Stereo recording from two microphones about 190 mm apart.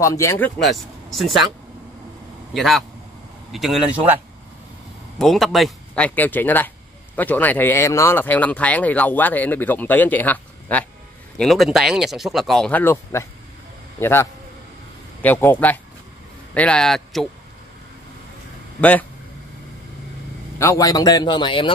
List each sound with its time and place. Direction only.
0.0 s speech: 15° left (ahead or behind)
0.6 s speech: centre (ahead or behind)
2.5 s speech: centre (ahead or behind)
5.2 s speech: centre (ahead or behind)
18.8 s speech: 10° left (ahead or behind)
20.5 s a man's voice: 15° left (ahead or behind)